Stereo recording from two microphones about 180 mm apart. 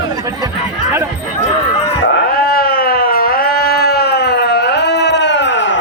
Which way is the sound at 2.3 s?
55° left (ahead or behind).